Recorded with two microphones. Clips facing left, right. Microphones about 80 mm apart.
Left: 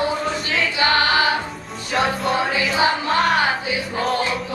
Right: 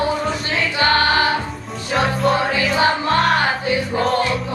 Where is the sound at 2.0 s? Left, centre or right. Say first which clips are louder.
Right 2 dB; centre.